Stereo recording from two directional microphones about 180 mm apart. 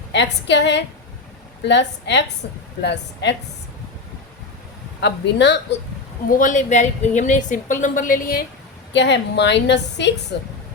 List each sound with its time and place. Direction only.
0.1 s a woman's voice: 75° left (ahead or behind)
4.9 s a woman's voice: 70° left (ahead or behind)
6.2 s a woman's voice: 45° left (ahead or behind)
8.9 s a woman's voice: 75° left (ahead or behind)